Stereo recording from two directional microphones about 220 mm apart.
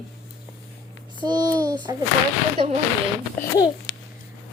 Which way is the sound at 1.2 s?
20° right (ahead or behind).